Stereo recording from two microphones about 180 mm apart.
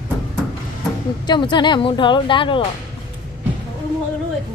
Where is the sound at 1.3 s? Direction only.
25° left (ahead or behind).